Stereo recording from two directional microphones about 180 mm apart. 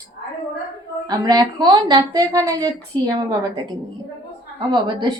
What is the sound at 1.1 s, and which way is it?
Speech, 20° right (ahead or behind).